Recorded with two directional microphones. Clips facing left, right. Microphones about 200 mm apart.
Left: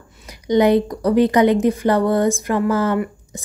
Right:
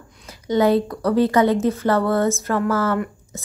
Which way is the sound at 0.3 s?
15° left (ahead or behind).